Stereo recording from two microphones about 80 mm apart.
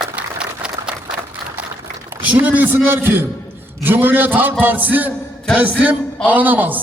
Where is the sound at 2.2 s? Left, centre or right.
Right.